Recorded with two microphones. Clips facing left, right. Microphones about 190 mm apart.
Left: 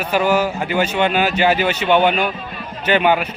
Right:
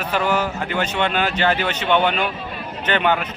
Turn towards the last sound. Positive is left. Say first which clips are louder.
# left 4 dB
turn(degrees=10)  # may be behind; listen again after turning